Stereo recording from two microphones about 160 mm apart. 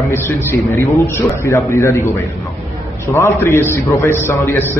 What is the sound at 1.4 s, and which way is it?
A man's voice, 20° left (ahead or behind).